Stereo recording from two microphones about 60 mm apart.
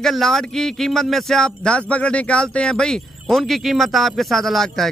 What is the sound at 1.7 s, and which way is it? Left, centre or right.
Speech, left.